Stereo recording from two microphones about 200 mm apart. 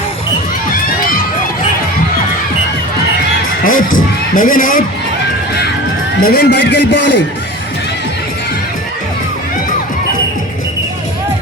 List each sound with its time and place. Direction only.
3.6 s children shouting: 45° left (ahead or behind)
4.4 s speech: 40° left (ahead or behind)
6.2 s a man's voice: 50° left (ahead or behind)